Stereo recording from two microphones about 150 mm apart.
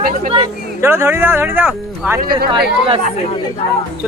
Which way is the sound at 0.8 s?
15° right (ahead or behind).